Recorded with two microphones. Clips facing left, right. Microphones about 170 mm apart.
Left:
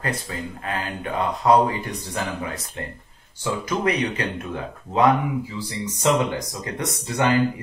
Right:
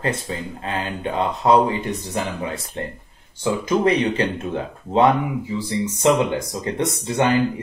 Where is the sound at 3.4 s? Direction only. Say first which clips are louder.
Right 5 dB; 30° right (ahead or behind).